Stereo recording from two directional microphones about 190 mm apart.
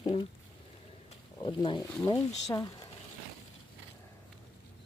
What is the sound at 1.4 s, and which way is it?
Speech, 25° left (ahead or behind).